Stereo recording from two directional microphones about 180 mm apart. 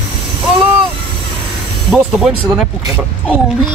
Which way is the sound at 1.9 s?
Centre (ahead or behind).